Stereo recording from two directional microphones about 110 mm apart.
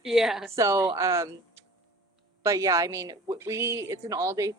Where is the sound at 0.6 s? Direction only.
30° right (ahead or behind).